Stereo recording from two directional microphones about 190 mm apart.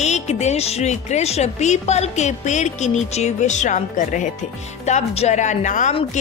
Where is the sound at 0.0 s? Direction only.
35° left (ahead or behind).